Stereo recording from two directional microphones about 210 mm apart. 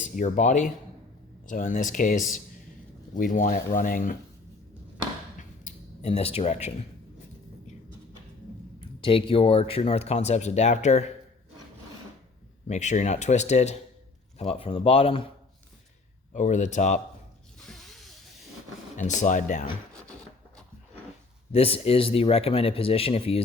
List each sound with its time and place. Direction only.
0.0 s speech: 35° left (ahead or behind)
5.4 s a sound: 35° left (ahead or behind)
8.8 s speech: 25° left (ahead or behind)
12.6 s speech: 35° left (ahead or behind)
16.3 s speech: 35° left (ahead or behind)
17.6 s snake: centre (ahead or behind)
18.9 s speech: 35° left (ahead or behind)
21.5 s speech: 30° left (ahead or behind)